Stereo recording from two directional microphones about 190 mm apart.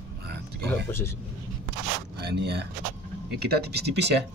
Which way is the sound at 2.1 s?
60° right (ahead or behind).